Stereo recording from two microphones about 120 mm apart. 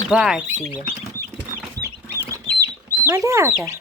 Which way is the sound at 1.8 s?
25° right (ahead or behind).